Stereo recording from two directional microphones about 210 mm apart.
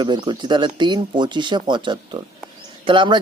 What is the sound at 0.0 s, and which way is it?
Speech, 20° right (ahead or behind).